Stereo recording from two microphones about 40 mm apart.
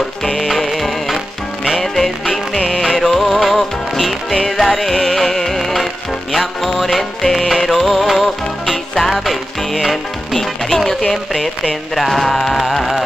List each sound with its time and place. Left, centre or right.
0.4 s music: centre
2.2 s music: centre
11.9 s carnatic music: centre